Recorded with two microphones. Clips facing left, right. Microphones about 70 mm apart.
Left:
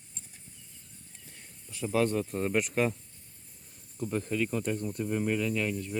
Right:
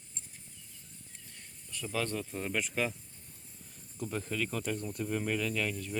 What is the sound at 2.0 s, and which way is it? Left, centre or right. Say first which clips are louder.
Speech: left 8 dB; left.